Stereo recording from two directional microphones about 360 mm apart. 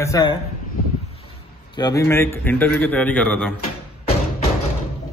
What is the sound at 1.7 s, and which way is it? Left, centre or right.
A man's voice, centre.